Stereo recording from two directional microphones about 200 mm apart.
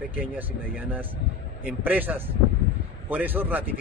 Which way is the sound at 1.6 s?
10° right (ahead or behind).